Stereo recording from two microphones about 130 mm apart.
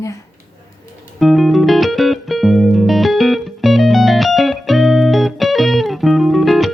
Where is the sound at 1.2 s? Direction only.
Centre (ahead or behind).